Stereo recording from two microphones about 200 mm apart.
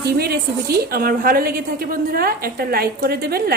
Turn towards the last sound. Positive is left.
turn(degrees=-50)  # may be behind; listen again after turning